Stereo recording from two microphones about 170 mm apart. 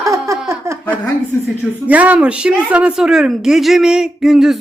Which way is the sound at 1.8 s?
10° right (ahead or behind).